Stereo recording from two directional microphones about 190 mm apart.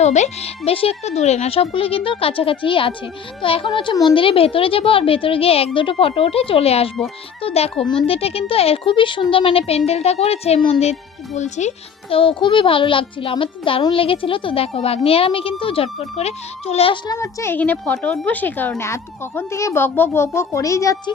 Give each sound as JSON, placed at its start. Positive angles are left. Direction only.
{"t": 0.0, "sound": "a child's voice", "side_deg": 35}
{"t": 12.1, "sound": "a child's voice", "side_deg": 25}
{"t": 17.2, "sound": "speech", "side_deg": 10}